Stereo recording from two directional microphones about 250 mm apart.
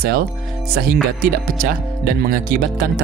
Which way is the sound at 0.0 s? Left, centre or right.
Right.